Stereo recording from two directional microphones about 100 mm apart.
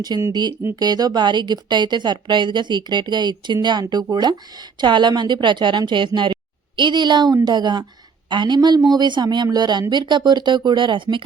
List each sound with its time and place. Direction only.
0.1 s a woman's voice: 45° right (ahead or behind)